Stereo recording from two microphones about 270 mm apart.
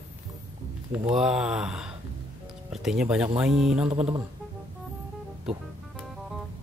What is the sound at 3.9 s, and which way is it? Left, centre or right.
Speech, right.